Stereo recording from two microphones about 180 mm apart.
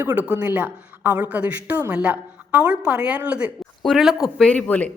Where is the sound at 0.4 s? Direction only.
10° right (ahead or behind).